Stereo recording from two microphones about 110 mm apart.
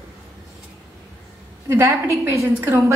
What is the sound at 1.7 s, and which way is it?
A woman's voice, 25° right (ahead or behind).